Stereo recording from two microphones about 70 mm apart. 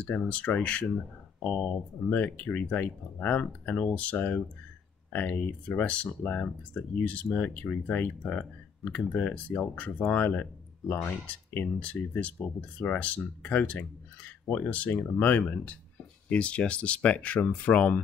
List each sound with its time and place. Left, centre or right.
0.0 s speech: centre
11.2 s speech: centre